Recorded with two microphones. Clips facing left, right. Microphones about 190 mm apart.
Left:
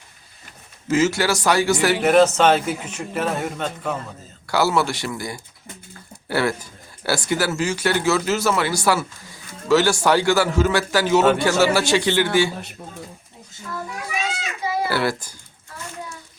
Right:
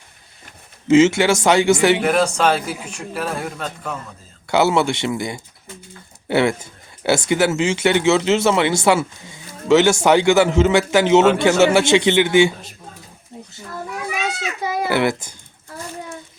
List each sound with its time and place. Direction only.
0.9 s speech: 25° right (ahead or behind)
2.0 s a man's voice: 5° left (ahead or behind)
4.4 s speech: 20° right (ahead or behind)
14.8 s speech: 20° right (ahead or behind)